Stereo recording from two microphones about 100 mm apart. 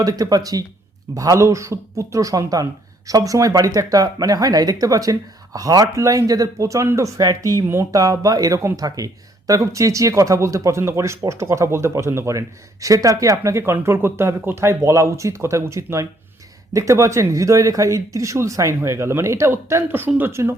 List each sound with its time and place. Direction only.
0.0 s speech: 40° right (ahead or behind)